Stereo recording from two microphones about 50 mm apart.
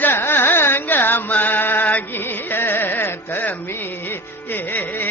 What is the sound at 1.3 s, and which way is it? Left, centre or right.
Music, left.